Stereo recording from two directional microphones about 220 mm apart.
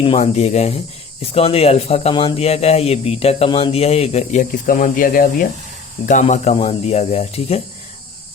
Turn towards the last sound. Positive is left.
turn(degrees=30)  # may be behind; listen again after turning